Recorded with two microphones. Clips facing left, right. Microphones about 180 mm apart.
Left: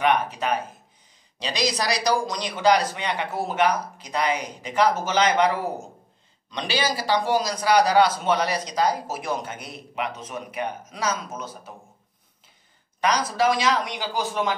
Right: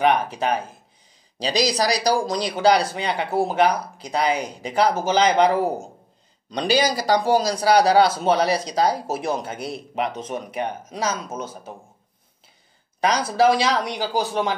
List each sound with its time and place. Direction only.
0.0 s speech: 35° right (ahead or behind)
13.1 s speech: 30° right (ahead or behind)